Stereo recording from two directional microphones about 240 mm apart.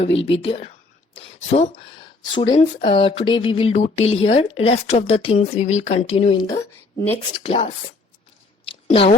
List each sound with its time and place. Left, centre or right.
0.0 s speech: left
8.9 s speech: left